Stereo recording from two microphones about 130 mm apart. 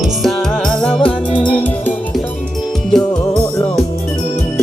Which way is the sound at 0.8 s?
10° left (ahead or behind).